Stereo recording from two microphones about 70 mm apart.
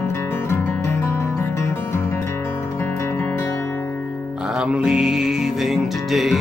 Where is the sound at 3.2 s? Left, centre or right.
Left.